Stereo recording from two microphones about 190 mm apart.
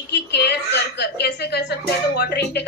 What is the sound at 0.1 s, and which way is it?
A woman's voice, 60° left (ahead or behind).